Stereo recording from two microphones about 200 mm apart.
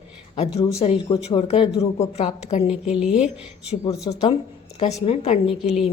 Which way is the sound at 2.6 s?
5° right (ahead or behind).